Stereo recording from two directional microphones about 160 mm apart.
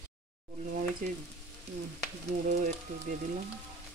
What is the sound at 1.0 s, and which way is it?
Frying, 55° right (ahead or behind).